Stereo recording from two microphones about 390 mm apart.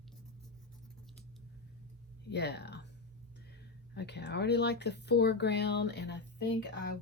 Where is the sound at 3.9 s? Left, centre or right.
Left.